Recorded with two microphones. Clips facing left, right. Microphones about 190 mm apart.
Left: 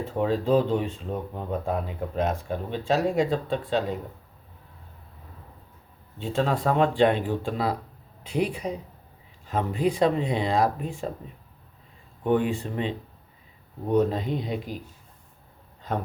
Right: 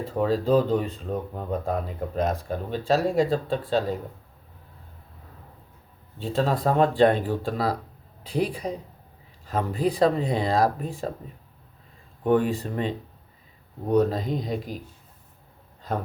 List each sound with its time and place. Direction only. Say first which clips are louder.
0.0 s speech: right 1 dB; 40° right (ahead or behind)
6.1 s speech: right 1 dB; 35° right (ahead or behind)
12.2 s speech: right 2 dB; 40° right (ahead or behind)